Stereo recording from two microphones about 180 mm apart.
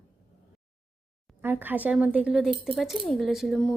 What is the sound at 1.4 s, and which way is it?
A woman's voice, 10° right (ahead or behind).